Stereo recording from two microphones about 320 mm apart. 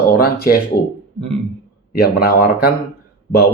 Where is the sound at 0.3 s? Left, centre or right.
Left.